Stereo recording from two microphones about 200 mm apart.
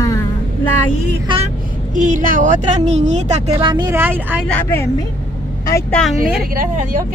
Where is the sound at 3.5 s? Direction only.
20° right (ahead or behind).